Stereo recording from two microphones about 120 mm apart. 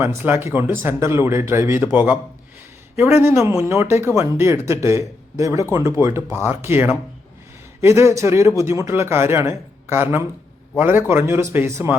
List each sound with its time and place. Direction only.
0.0 s a man's voice: 20° right (ahead or behind)